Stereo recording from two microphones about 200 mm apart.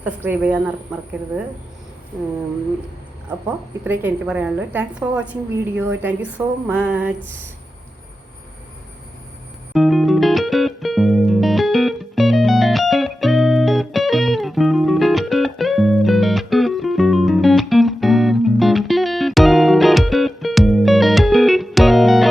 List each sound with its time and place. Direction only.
0.0 s a woman's voice: 5° right (ahead or behind)
3.8 s a woman's voice: 10° right (ahead or behind)
9.7 s music: centre (ahead or behind)